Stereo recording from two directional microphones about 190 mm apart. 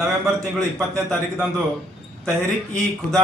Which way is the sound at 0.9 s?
15° right (ahead or behind).